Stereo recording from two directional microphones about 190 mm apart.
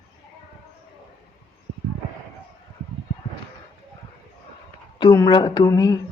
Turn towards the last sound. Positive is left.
turn(degrees=20)  # may be behind; listen again after turning